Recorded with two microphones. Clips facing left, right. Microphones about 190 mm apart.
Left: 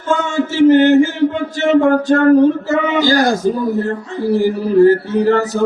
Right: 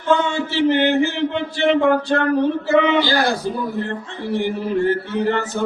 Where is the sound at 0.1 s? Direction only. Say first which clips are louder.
Left 2 dB; 45° left (ahead or behind).